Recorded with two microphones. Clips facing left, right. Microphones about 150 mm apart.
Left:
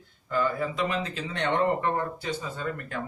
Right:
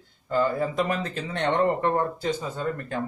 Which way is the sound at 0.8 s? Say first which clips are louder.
Right 3 dB; 50° right (ahead or behind).